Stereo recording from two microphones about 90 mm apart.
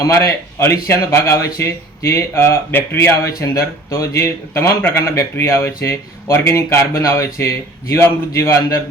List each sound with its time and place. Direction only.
0.0 s speech: 35° left (ahead or behind)